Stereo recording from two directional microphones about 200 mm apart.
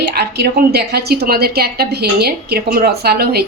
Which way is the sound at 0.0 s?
55° right (ahead or behind).